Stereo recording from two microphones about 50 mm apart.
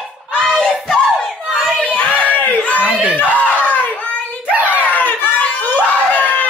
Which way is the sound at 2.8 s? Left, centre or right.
Right.